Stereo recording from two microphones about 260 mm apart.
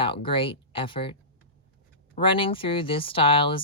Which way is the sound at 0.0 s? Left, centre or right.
Centre.